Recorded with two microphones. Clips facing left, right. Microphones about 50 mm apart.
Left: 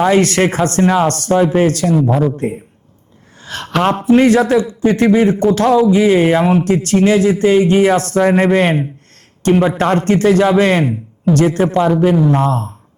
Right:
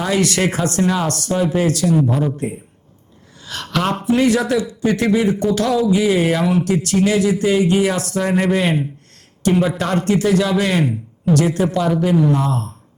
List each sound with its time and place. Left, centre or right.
0.0 s a man's voice: left
4.4 s a man's voice: left
12.1 s a man's voice: left